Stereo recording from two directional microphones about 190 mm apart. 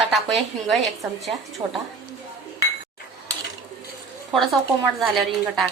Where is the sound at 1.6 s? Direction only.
25° right (ahead or behind).